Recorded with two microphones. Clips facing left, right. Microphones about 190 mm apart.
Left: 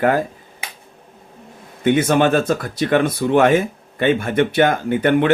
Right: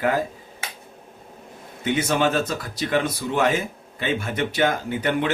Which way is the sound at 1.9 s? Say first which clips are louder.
Left 7 dB; 55° left (ahead or behind).